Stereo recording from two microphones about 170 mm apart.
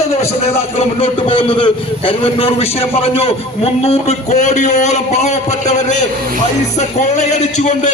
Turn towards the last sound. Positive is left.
turn(degrees=45)  # may be behind; listen again after turning